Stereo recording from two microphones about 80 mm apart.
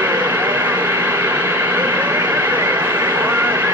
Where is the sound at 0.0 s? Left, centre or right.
Right.